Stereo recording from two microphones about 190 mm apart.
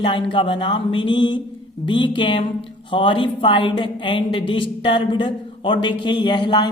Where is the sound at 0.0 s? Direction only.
25° left (ahead or behind).